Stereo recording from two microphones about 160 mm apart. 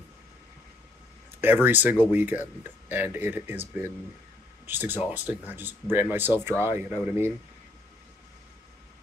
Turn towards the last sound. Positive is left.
turn(degrees=-15)  # may be behind; listen again after turning